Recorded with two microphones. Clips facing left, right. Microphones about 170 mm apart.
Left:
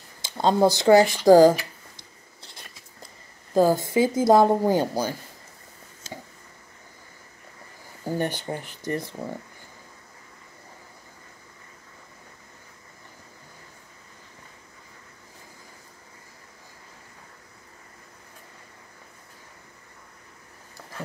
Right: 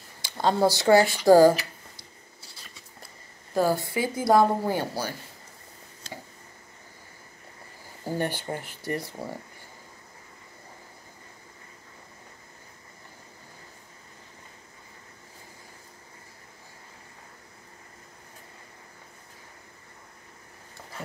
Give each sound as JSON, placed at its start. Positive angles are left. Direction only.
{"t": 0.2, "sound": "speech", "side_deg": 25}
{"t": 3.5, "sound": "speech", "side_deg": 20}
{"t": 8.0, "sound": "speech", "side_deg": 15}